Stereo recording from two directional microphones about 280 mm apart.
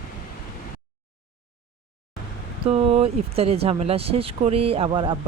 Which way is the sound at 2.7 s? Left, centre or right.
Right.